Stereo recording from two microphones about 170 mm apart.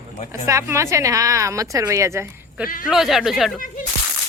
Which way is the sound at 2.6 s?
55° left (ahead or behind).